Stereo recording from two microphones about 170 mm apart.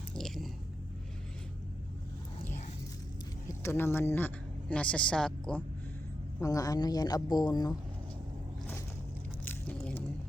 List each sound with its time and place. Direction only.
0.1 s biting: centre (ahead or behind)
3.6 s a woman's voice: 15° left (ahead or behind)
6.4 s a woman's voice: 20° left (ahead or behind)
9.4 s squish: 10° left (ahead or behind)